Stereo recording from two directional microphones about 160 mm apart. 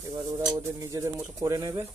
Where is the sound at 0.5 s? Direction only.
20° right (ahead or behind).